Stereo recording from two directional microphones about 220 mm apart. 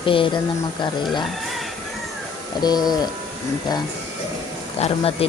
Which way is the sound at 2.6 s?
20° left (ahead or behind).